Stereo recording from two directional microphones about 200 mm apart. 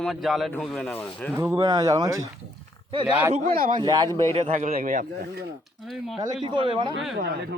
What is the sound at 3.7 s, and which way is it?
Speech, 20° right (ahead or behind).